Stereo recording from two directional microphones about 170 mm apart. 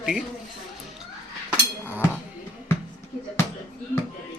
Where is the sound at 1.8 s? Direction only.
10° left (ahead or behind).